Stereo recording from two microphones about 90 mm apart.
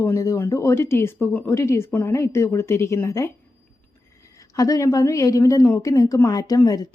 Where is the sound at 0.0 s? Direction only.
35° left (ahead or behind).